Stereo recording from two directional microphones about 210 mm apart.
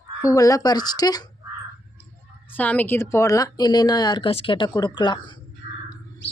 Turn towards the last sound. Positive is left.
turn(degrees=20)  # may be behind; listen again after turning